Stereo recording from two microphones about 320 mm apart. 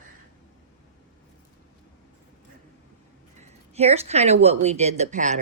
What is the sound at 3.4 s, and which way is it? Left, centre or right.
Speech, centre.